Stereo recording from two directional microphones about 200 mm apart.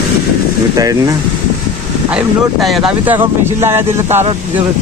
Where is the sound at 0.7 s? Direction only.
15° right (ahead or behind).